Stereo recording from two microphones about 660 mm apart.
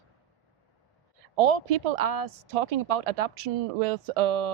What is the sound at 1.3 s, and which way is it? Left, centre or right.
Speech, right.